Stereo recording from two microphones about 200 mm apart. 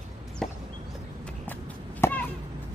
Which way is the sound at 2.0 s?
10° left (ahead or behind).